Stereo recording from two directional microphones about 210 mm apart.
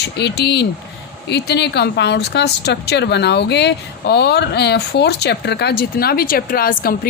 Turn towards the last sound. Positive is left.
turn(degrees=45)  # may be behind; listen again after turning